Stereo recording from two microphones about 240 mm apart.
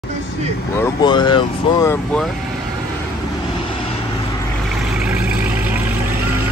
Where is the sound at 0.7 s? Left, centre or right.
Centre.